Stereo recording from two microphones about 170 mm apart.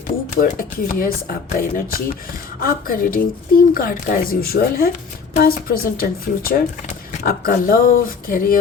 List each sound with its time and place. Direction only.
0.3 s speech: 55° left (ahead or behind)